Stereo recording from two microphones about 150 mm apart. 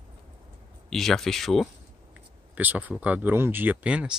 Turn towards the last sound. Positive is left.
turn(degrees=-10)  # may be behind; listen again after turning